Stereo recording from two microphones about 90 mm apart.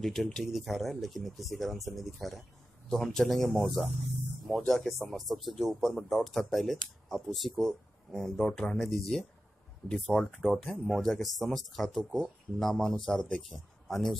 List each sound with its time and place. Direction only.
0.0 s speech: centre (ahead or behind)